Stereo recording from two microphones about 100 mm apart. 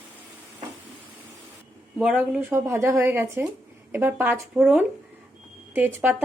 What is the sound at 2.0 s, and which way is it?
Speech, 5° right (ahead or behind).